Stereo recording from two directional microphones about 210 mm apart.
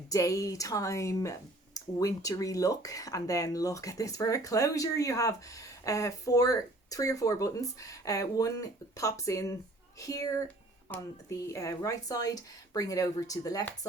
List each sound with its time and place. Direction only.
0.1 s speech: 15° left (ahead or behind)